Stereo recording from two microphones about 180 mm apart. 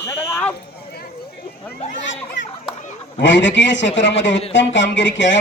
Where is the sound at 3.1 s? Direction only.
90° left.